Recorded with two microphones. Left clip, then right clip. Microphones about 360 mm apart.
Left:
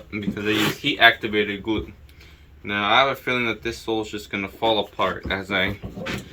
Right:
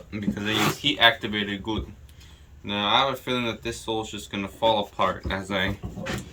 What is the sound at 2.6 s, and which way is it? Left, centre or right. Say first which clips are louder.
Speech: left 4 dB; centre.